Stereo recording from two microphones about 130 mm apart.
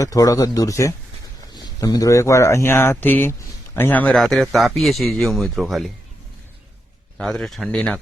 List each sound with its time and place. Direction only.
0.0 s a man's voice: 25° left (ahead or behind)
4.1 s speech: centre (ahead or behind)
7.2 s speech: centre (ahead or behind)